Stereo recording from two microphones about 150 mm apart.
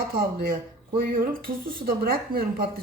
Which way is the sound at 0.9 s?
70° right (ahead or behind).